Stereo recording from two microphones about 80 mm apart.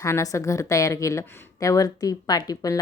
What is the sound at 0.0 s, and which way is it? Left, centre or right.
A woman's voice, left.